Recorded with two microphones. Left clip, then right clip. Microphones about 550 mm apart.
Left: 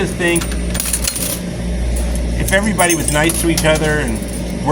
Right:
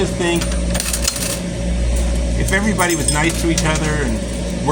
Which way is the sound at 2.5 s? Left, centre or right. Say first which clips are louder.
Left 3 dB; left.